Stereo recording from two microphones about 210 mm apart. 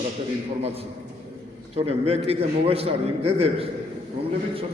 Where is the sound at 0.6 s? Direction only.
30° right (ahead or behind).